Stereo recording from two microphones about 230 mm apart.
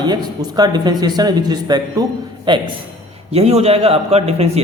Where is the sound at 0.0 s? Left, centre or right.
Centre.